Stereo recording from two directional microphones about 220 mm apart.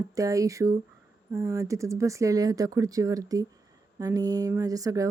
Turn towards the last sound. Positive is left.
turn(degrees=-15)  # may be behind; listen again after turning